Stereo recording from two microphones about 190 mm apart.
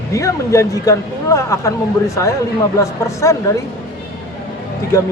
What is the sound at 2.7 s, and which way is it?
Speech, 15° left (ahead or behind).